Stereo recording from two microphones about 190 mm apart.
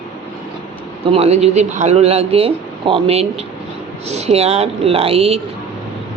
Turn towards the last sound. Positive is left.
turn(degrees=-30)  # may be behind; listen again after turning